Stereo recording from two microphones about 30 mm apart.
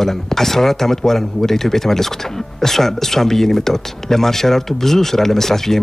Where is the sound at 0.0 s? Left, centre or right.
Centre.